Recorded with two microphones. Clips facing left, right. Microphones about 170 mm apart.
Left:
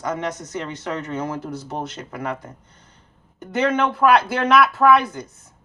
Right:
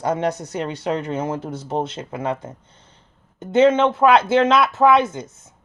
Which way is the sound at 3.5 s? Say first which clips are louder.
Right 6 dB; 25° right (ahead or behind).